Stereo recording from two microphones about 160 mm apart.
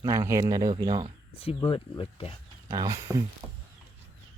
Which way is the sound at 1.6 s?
30° left (ahead or behind).